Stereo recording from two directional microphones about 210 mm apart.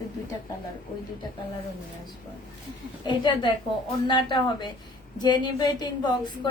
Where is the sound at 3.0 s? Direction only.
20° left (ahead or behind).